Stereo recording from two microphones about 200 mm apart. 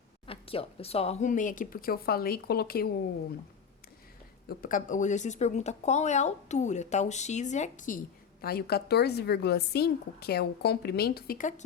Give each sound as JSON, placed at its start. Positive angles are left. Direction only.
{"t": 0.3, "sound": "speech", "side_deg": 30}
{"t": 4.4, "sound": "speech", "side_deg": 45}